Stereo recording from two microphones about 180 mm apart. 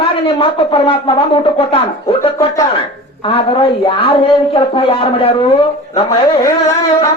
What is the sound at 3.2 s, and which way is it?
Speech, 30° left (ahead or behind).